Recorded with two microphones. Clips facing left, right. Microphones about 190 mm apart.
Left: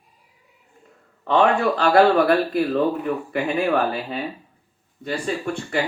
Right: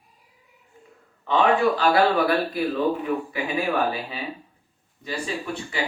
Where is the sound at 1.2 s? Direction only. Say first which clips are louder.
Left 2 dB; 60° left (ahead or behind).